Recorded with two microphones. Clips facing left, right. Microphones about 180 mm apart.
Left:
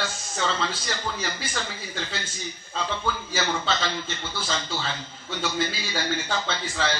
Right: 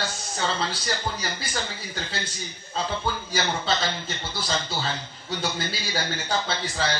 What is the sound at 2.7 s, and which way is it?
A man's voice, 40° right (ahead or behind).